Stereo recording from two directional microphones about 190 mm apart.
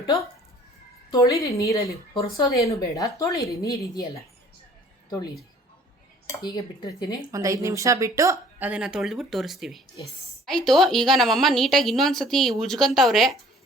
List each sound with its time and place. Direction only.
0.0 s a woman's voice: 15° left (ahead or behind)
6.3 s speech: 20° left (ahead or behind)
7.3 s a woman's voice: 15° right (ahead or behind); by 13.3 s centre (ahead or behind)